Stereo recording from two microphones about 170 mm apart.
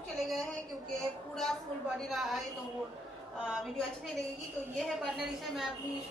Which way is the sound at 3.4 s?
Centre (ahead or behind).